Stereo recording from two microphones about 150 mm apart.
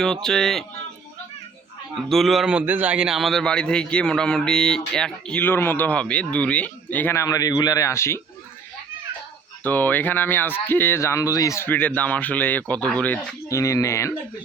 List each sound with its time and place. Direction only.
0.0 s speech: 5° left (ahead or behind)
2.0 s a man's voice: centre (ahead or behind); by 8.2 s 20° left (ahead or behind)
9.6 s a man's voice: 10° left (ahead or behind)
13.5 s speech: 20° left (ahead or behind)